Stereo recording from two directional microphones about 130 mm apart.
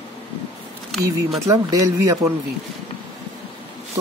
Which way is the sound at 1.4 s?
25° right (ahead or behind).